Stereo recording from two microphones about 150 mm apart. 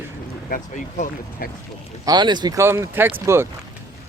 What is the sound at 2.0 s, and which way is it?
Speech, 30° right (ahead or behind).